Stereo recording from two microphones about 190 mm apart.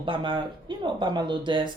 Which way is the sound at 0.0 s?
25° right (ahead or behind).